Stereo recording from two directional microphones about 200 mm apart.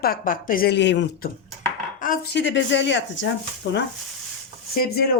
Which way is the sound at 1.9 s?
45° left (ahead or behind).